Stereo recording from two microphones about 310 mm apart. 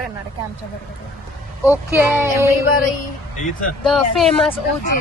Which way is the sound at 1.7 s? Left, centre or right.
Centre.